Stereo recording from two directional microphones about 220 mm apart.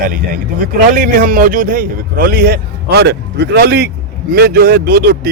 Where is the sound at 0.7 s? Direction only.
40° right (ahead or behind).